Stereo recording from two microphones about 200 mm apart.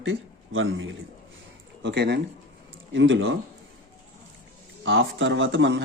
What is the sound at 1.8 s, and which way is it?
Speech, 60° right (ahead or behind).